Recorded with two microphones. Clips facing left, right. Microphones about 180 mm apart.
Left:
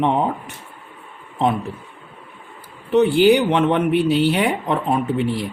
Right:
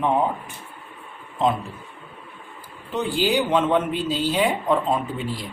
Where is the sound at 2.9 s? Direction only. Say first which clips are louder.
Left 9 dB; 65° left (ahead or behind).